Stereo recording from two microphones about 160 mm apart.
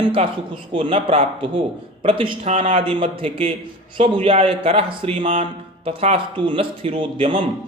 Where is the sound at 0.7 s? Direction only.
30° right (ahead or behind).